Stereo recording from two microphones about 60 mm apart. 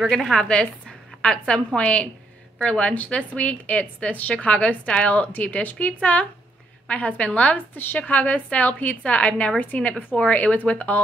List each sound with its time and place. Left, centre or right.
0.0 s a woman's voice: centre; by 7.5 s left
7.5 s a woman's voice: left